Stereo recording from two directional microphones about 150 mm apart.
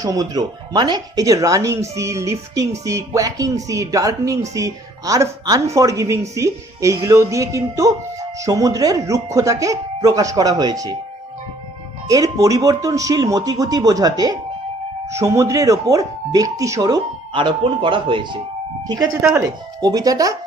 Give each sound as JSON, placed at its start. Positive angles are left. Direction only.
{"t": 0.0, "sound": "speech", "side_deg": -25}
{"t": 12.0, "sound": "speech", "side_deg": -25}
{"t": 19.8, "sound": "speech", "side_deg": -25}